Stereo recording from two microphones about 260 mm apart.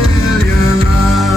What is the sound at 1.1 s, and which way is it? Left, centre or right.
Music, centre.